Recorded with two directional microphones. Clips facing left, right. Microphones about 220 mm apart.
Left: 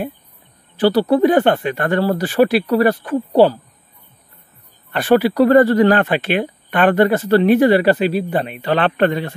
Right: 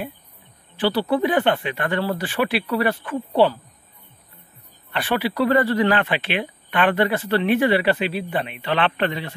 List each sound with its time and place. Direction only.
0.7 s speech: 40° left (ahead or behind)
4.9 s speech: 45° left (ahead or behind)